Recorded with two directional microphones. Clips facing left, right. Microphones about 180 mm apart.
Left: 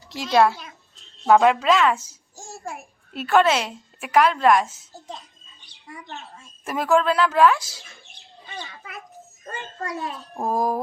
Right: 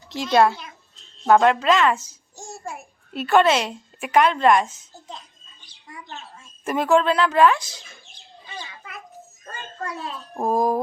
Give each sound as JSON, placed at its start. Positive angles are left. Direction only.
{"t": 0.1, "sound": "a child's voice", "side_deg": 5}
{"t": 6.7, "sound": "a woman's voice", "side_deg": 5}
{"t": 9.4, "sound": "a child's voice", "side_deg": 20}
{"t": 10.3, "sound": "a woman's voice", "side_deg": 0}